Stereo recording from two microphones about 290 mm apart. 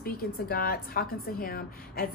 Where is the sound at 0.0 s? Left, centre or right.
Left.